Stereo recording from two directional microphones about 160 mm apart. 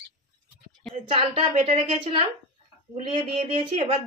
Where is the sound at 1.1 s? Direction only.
40° right (ahead or behind).